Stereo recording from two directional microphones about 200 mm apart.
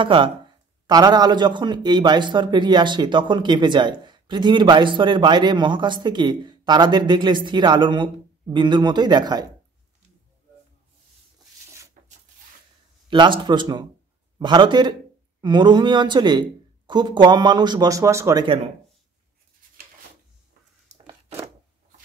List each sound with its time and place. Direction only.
0.0 s a man's voice: 25° right (ahead or behind)
13.1 s a man's voice: 25° right (ahead or behind)
20.9 s a sound: 35° right (ahead or behind)